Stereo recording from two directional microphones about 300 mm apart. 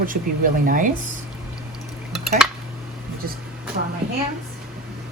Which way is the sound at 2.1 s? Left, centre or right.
Centre.